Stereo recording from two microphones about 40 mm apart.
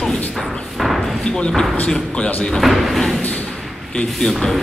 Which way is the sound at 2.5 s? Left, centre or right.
Centre.